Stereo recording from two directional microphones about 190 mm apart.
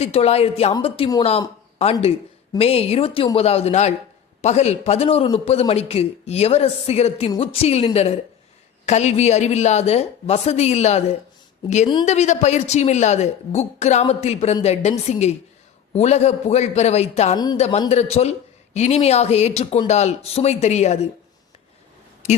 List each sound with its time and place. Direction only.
0.0 s a man's voice: 35° left (ahead or behind)
8.9 s a man's voice: 35° left (ahead or behind)
12.0 s a man's voice: 35° left (ahead or behind)
17.3 s speech: 20° left (ahead or behind)
17.6 s a man's voice: 35° left (ahead or behind)